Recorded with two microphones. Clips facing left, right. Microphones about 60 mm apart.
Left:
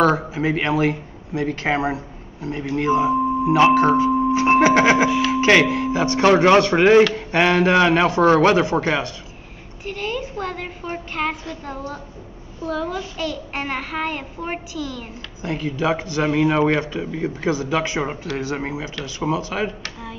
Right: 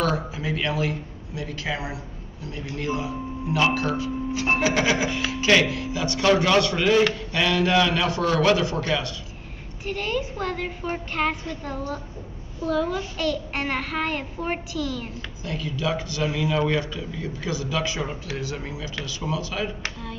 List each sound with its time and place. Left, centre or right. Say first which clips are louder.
0.0 s speech: left 7 dB; left
9.8 s a child's voice: even; centre
15.4 s speech: left 6 dB; left